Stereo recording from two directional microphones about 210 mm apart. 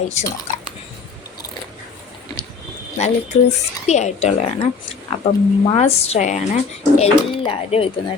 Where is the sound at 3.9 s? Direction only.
30° left (ahead or behind).